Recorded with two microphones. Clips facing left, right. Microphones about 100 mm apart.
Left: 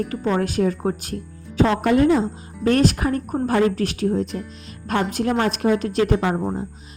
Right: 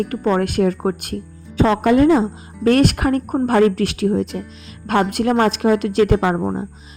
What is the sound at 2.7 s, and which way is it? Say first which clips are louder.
Speech: right 3 dB; 65° right (ahead or behind).